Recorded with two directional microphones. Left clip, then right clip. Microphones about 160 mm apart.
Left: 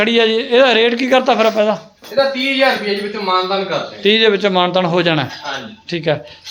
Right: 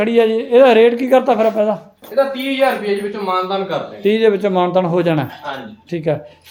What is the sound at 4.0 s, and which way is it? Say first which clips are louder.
Speech: left 2 dB; 10° right (ahead or behind).